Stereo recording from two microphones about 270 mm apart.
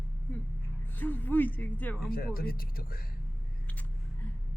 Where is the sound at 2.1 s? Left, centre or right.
Left.